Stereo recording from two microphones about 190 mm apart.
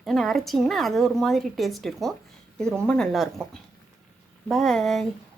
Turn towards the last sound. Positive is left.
turn(degrees=0)  # may be behind; listen again after turning